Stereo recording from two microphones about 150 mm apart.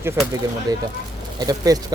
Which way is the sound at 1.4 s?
25° right (ahead or behind).